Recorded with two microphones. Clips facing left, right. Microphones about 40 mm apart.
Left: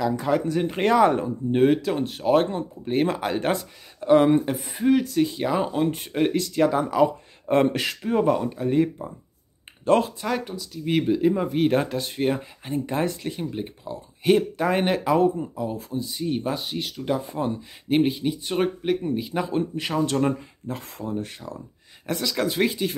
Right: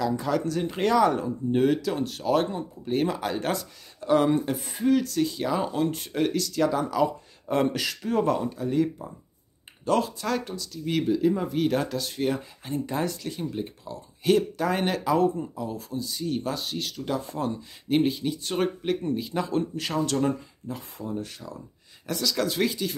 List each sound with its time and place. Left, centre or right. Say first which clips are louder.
0.2 s speech: left 3 dB; left
4.6 s speech: left 2 dB; centre; by 8.0 s left
8.0 s speech: left 3 dB; centre; by 10.1 s left
10.2 s speech: left 1 dB; centre
20.6 s speech: left 3 dB; left
21.1 s speech: left 3 dB; left